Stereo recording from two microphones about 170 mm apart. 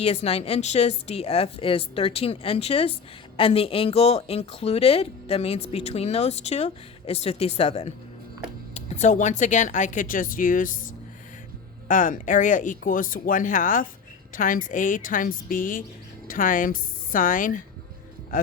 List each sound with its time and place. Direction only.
0.0 s speech: 35° left (ahead or behind); by 10.7 s 55° left (ahead or behind)
11.9 s speech: 50° left (ahead or behind)